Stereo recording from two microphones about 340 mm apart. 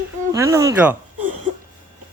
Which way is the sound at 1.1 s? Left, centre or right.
Right.